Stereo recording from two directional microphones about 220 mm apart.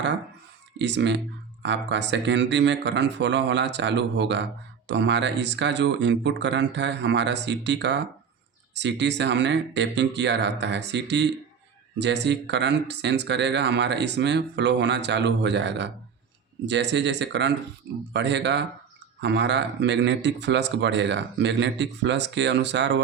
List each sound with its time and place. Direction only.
0.8 s speech: 55° right (ahead or behind)